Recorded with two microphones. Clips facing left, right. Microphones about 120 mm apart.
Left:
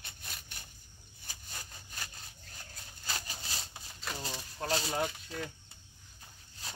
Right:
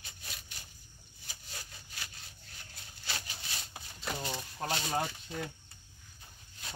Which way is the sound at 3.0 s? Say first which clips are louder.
Left 1 dB; 40° left (ahead or behind).